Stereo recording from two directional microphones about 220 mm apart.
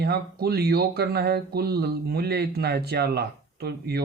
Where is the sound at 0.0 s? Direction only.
45° right (ahead or behind).